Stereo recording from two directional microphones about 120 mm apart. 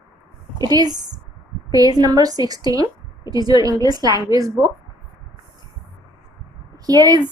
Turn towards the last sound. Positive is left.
turn(degrees=-30)  # may be behind; listen again after turning